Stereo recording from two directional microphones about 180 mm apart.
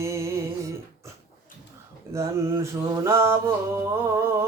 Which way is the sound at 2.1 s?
15° right (ahead or behind).